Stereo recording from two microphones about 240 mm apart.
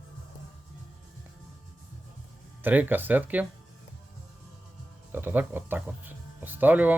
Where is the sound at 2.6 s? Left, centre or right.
Centre.